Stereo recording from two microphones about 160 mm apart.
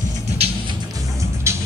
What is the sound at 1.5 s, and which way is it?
Music, 15° right (ahead or behind).